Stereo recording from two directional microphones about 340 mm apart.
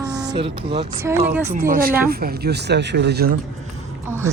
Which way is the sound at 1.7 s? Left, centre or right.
Right.